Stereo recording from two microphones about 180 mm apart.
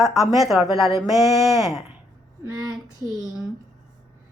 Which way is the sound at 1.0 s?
15° right (ahead or behind).